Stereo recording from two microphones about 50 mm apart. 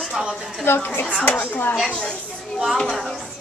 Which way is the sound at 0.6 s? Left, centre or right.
Left.